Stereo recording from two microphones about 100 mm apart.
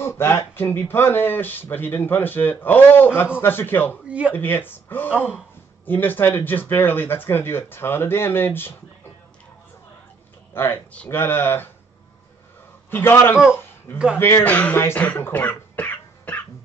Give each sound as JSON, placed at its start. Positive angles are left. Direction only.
{"t": 0.0, "sound": "speech", "side_deg": 25}
{"t": 5.1, "sound": "speech", "side_deg": -10}
{"t": 5.9, "sound": "speech", "side_deg": 20}
{"t": 10.5, "sound": "speech", "side_deg": 25}
{"t": 12.9, "sound": "speech", "side_deg": 25}